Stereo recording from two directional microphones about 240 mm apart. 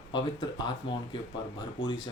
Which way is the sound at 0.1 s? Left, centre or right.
Centre.